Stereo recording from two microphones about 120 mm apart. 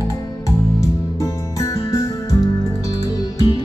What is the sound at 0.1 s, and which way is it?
Music, 25° left (ahead or behind).